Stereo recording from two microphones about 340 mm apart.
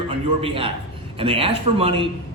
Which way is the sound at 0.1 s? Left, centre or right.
Centre.